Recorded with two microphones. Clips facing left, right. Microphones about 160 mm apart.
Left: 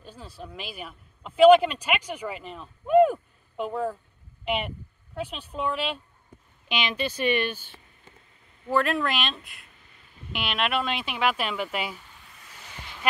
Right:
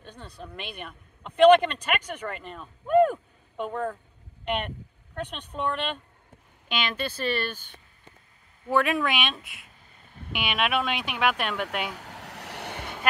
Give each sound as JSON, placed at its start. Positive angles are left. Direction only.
{"t": 0.0, "sound": "speech", "side_deg": 5}
{"t": 8.6, "sound": "speech", "side_deg": 0}
{"t": 11.9, "sound": "a sound", "side_deg": -80}